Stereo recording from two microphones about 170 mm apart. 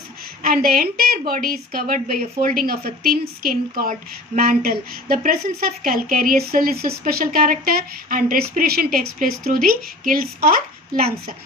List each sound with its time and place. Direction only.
0.4 s speech: 60° right (ahead or behind)